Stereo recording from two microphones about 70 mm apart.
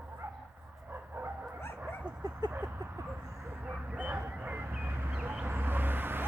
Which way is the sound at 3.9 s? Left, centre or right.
Right.